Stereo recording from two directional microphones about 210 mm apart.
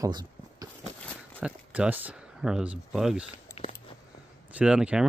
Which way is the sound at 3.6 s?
30° left (ahead or behind).